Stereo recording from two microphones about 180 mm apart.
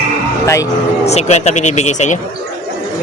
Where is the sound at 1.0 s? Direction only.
35° left (ahead or behind).